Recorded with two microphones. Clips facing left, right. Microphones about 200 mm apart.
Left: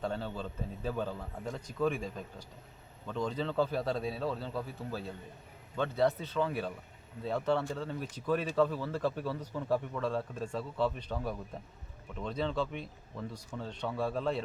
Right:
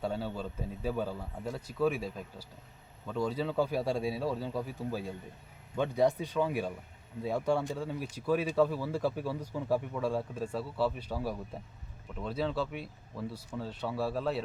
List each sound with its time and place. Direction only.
0.0 s speech: 10° right (ahead or behind)